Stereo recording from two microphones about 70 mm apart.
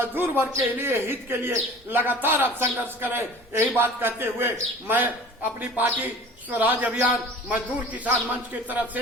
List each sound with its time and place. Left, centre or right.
0.0 s a man's voice: right